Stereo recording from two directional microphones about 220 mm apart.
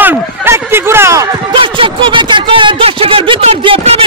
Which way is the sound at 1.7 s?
25° right (ahead or behind).